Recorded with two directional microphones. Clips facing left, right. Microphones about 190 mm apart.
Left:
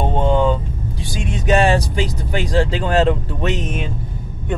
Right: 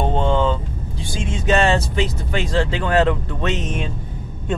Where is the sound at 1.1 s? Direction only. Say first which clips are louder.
Left 2 dB; 15° left (ahead or behind).